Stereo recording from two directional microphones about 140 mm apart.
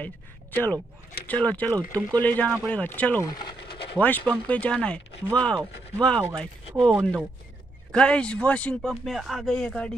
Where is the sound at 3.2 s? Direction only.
30° left (ahead or behind).